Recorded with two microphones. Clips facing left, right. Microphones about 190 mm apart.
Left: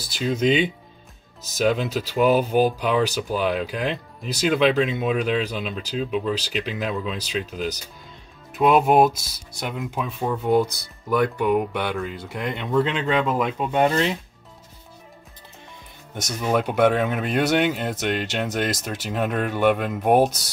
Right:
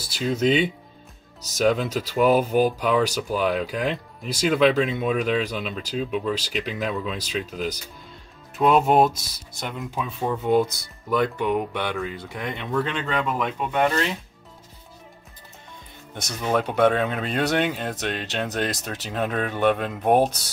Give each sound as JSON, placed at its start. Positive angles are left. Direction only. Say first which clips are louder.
{"t": 0.1, "sound": "speech", "louder": "even", "side_deg": 0}
{"t": 13.7, "sound": "speech", "louder": "left 2 dB", "side_deg": 20}
{"t": 16.3, "sound": "speech", "louder": "left 1 dB", "side_deg": 5}